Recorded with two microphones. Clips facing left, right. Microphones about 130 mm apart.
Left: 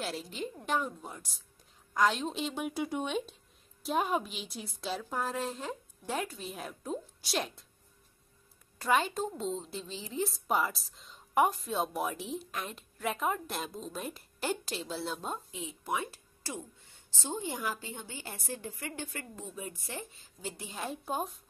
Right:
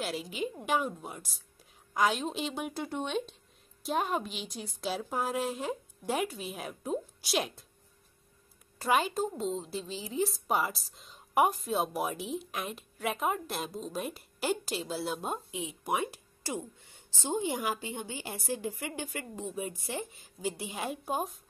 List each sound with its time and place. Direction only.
0.0 s a woman's voice: 5° right (ahead or behind)
8.8 s a woman's voice: 5° right (ahead or behind)